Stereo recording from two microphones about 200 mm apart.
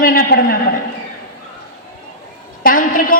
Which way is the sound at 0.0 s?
50° left (ahead or behind).